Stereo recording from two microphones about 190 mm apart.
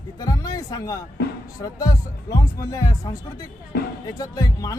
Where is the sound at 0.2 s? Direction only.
20° left (ahead or behind).